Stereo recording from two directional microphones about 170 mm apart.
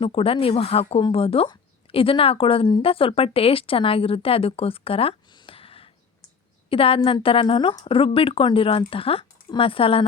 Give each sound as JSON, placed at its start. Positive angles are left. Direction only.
{"t": 0.0, "sound": "speech", "side_deg": 35}